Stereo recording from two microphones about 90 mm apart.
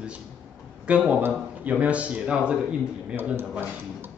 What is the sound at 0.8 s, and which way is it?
A man's voice, 15° right (ahead or behind).